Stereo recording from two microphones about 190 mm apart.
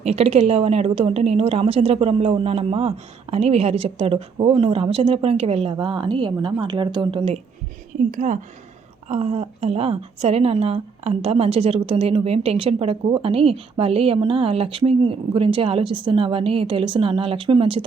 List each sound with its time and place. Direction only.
0.0 s a woman's voice: 35° right (ahead or behind)
8.1 s a woman's voice: 40° right (ahead or behind)